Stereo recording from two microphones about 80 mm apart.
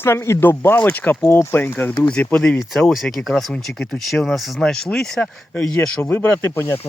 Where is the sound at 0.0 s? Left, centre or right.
Left.